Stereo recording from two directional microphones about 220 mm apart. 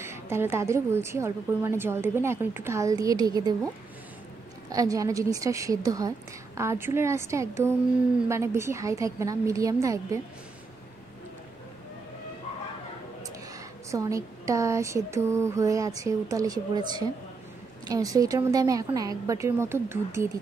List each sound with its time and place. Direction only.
0.0 s a woman's voice: 10° right (ahead or behind)
4.6 s a woman's voice: 15° right (ahead or behind)
13.8 s a woman's voice: 15° right (ahead or behind)